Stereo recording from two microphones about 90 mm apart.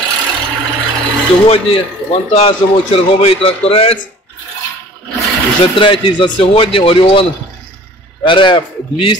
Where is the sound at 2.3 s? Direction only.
90° left.